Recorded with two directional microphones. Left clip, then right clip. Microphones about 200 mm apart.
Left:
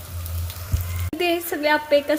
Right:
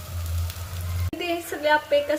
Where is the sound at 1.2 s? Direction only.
30° left (ahead or behind).